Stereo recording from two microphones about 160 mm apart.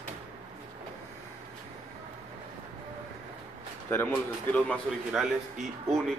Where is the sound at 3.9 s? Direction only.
10° left (ahead or behind).